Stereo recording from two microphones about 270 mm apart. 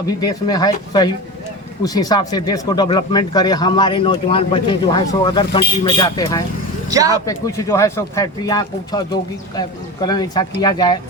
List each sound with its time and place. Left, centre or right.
0.2 s speech: centre
6.9 s speech: centre
7.3 s speech: centre